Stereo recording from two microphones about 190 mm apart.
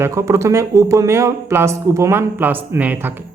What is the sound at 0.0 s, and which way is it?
Speech, 15° right (ahead or behind).